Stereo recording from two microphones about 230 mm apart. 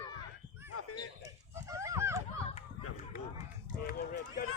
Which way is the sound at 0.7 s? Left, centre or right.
Left.